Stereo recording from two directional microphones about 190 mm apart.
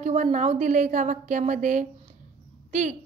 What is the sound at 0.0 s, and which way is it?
A woman's voice, 40° right (ahead or behind).